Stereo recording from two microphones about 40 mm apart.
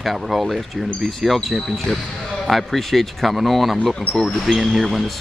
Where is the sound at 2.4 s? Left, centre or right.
Centre.